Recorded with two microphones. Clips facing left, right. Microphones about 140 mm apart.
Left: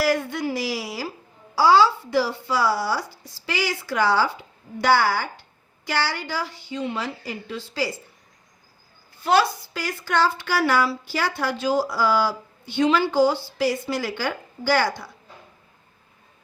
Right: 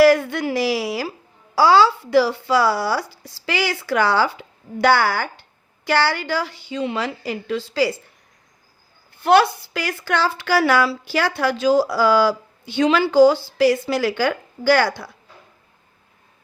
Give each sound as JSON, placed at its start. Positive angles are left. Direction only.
{"t": 0.0, "sound": "a woman's voice", "side_deg": -70}
{"t": 9.2, "sound": "speech", "side_deg": -60}